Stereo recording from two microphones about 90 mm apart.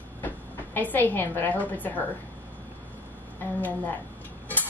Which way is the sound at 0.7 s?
20° left (ahead or behind).